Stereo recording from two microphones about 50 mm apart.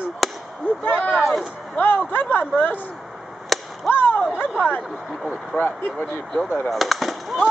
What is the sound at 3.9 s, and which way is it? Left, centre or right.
Speech, left.